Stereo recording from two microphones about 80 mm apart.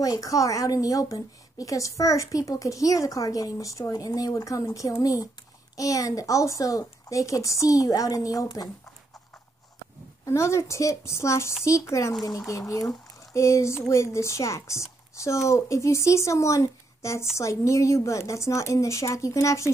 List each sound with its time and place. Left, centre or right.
0.0 s a woman's voice: left
10.2 s speech: left